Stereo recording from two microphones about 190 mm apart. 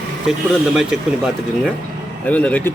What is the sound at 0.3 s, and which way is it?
Speech, 5° right (ahead or behind).